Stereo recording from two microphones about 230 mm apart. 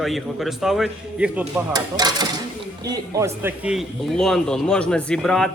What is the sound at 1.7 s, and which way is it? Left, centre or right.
Dishes, centre.